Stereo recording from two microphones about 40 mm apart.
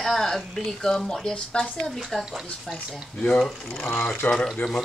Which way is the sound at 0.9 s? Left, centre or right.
Left.